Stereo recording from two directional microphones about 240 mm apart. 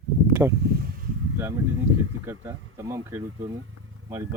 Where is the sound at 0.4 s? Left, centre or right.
Centre.